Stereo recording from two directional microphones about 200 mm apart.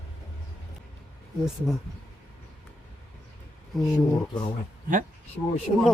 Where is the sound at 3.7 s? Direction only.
Centre (ahead or behind).